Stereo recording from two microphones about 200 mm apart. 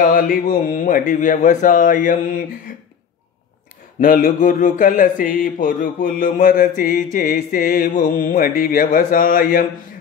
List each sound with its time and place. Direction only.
0.0 s speech: 45° left (ahead or behind)
4.0 s speech: 40° left (ahead or behind)